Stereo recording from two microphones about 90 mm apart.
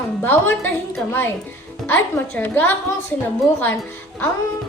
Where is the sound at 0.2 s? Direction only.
25° left (ahead or behind).